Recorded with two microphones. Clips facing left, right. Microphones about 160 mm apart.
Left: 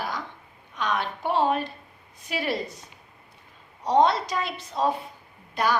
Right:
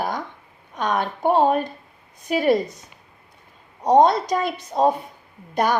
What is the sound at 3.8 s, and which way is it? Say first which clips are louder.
A woman's voice: right 5 dB; 45° right (ahead or behind).